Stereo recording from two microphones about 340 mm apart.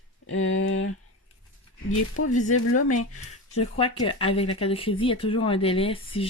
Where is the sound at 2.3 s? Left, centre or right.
Left.